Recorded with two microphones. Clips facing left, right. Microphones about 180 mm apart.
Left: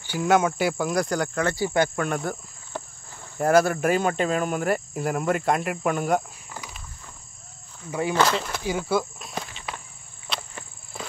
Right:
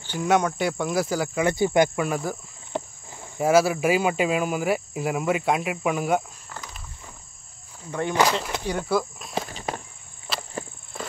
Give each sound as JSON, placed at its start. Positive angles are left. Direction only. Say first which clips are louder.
{"t": 0.0, "sound": "speech", "louder": "left 1 dB", "side_deg": 5}
{"t": 1.5, "sound": "cricket", "louder": "right 5 dB", "side_deg": -20}
{"t": 2.0, "sound": "speech", "louder": "right 1 dB", "side_deg": -5}
{"t": 2.7, "sound": "cricket", "louder": "right 5 dB", "side_deg": -20}
{"t": 3.3, "sound": "speech", "louder": "even", "side_deg": -5}
{"t": 8.1, "sound": "cricket", "louder": "right 1 dB", "side_deg": -10}
{"t": 8.6, "sound": "speech", "louder": "even", "side_deg": 0}
{"t": 9.5, "sound": "cricket", "louder": "right 6 dB", "side_deg": -40}
{"t": 10.3, "sound": "cricket", "louder": "right 1 dB", "side_deg": 0}